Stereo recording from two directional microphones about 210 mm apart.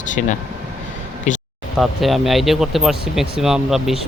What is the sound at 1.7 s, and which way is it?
Speech, centre (ahead or behind).